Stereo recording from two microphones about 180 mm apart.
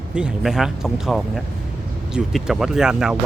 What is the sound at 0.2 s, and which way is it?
Speech, 5° right (ahead or behind).